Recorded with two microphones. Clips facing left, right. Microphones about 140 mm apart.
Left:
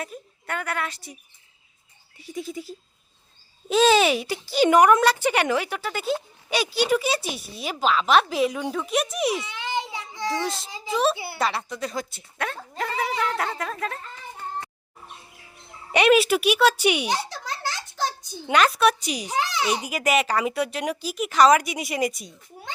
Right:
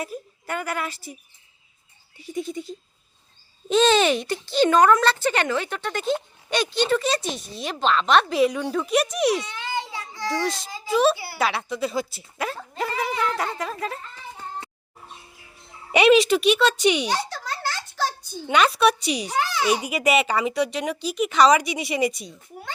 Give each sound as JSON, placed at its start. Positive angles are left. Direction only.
{"t": 0.0, "sound": "a woman's voice", "side_deg": -5}
{"t": 2.1, "sound": "speech", "side_deg": 0}
{"t": 9.6, "sound": "child singing", "side_deg": 20}
{"t": 10.4, "sound": "a child's voice", "side_deg": 0}
{"t": 11.1, "sound": "speech", "side_deg": 20}
{"t": 11.3, "sound": "speech", "side_deg": 0}
{"t": 15.9, "sound": "speech", "side_deg": 0}
{"t": 17.6, "sound": "a sound", "side_deg": 20}
{"t": 18.5, "sound": "speech", "side_deg": 0}
{"t": 19.5, "sound": "a child's voice", "side_deg": 20}
{"t": 19.8, "sound": "speech", "side_deg": 0}